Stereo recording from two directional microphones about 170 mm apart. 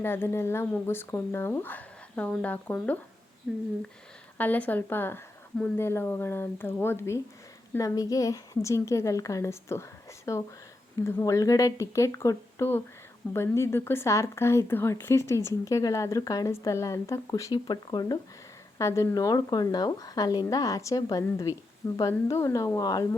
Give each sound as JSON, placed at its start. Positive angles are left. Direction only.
{"t": 0.0, "sound": "speech", "side_deg": 15}
{"t": 4.4, "sound": "speech", "side_deg": 10}